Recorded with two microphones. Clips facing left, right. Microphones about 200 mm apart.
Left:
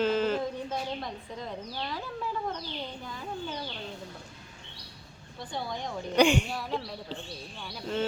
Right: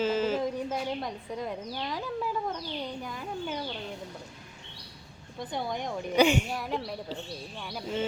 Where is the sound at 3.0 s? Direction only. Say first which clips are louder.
Right 2 dB; 15° right (ahead or behind).